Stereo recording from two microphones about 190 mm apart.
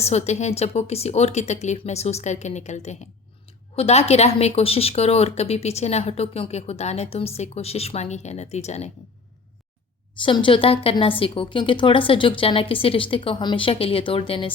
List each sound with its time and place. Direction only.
0.0 s speech: 35° left (ahead or behind)
10.2 s a woman's voice: 25° left (ahead or behind)